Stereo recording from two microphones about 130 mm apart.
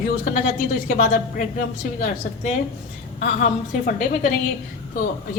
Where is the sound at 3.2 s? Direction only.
90° left.